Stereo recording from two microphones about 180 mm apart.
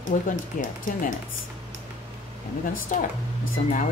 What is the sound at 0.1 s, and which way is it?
Speech, 45° left (ahead or behind).